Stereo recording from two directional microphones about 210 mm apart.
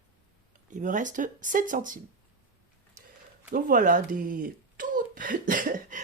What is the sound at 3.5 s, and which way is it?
Speech, 40° right (ahead or behind).